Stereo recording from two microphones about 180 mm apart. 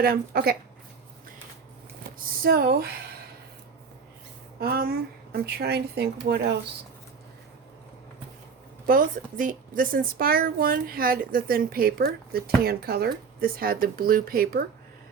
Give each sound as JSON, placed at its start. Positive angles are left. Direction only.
{"t": 0.0, "sound": "a woman's voice", "side_deg": -55}
{"t": 2.1, "sound": "speech", "side_deg": -55}
{"t": 4.6, "sound": "a woman's voice", "side_deg": -60}
{"t": 8.9, "sound": "a woman's voice", "side_deg": -50}